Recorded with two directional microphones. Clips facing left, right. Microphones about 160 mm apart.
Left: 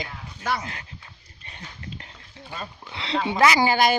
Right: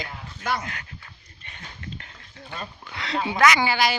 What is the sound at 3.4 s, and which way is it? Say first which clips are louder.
Speech: left 2 dB; 35° left (ahead or behind).